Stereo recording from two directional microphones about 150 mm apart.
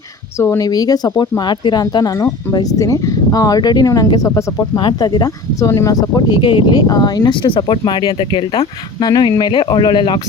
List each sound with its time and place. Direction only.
0.3 s speech: 15° left (ahead or behind); by 10.2 s 35° left (ahead or behind)